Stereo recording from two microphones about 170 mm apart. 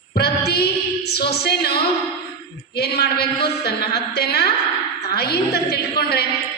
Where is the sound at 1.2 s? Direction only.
70° left (ahead or behind).